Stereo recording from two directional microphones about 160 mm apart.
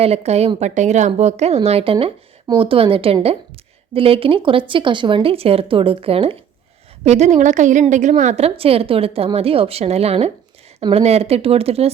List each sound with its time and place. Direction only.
0.0 s a woman's voice: 40° right (ahead or behind)